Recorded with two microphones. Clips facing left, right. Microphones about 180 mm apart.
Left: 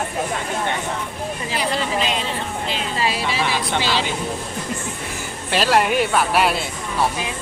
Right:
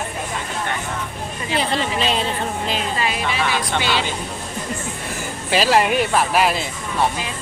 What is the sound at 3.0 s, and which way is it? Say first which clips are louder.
Speech: left 1 dB; 30° left (ahead or behind).